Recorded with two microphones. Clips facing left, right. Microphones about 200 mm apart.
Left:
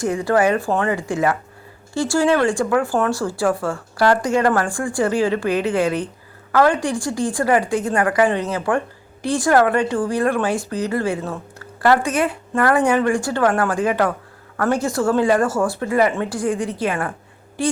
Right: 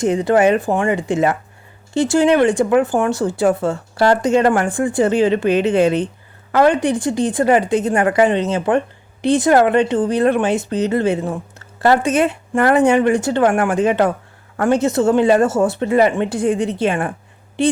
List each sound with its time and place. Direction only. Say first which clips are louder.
0.0 s a woman's voice: right 4 dB; 20° right (ahead or behind)